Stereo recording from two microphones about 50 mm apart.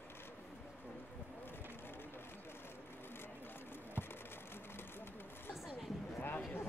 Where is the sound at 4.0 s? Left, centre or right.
Left.